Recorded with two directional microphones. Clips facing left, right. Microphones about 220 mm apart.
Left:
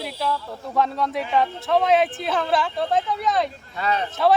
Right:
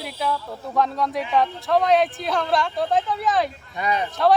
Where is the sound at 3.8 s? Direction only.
15° right (ahead or behind).